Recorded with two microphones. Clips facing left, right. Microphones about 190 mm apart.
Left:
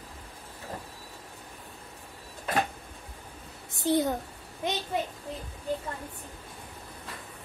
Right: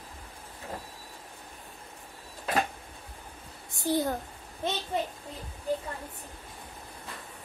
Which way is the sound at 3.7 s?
20° left (ahead or behind).